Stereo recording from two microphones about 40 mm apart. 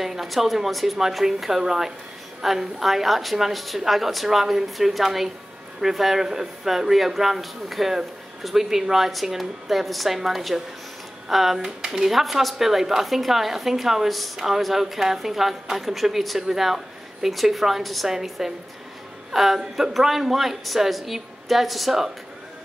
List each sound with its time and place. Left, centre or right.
0.0 s a woman's voice: centre
12.1 s a man's voice: centre